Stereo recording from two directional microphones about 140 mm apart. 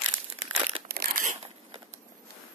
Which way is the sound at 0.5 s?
45° right (ahead or behind).